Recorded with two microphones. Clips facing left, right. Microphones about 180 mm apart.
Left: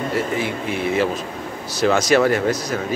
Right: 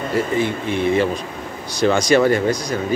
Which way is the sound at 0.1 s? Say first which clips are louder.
Right 7 dB; 5° left (ahead or behind).